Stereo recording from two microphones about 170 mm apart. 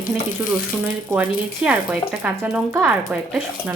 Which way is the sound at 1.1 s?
10° right (ahead or behind).